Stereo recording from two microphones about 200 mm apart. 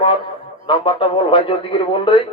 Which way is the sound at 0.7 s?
25° left (ahead or behind).